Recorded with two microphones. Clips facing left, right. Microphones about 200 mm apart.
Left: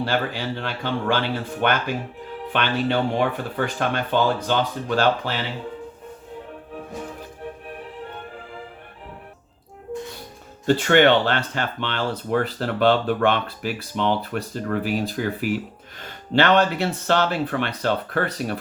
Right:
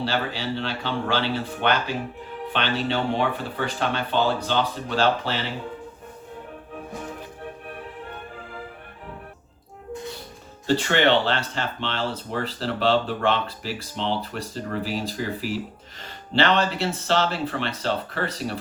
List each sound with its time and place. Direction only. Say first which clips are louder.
0.0 s speech: left 2 dB; 50° left (ahead or behind)
10.8 s speech: left 5 dB; 55° left (ahead or behind)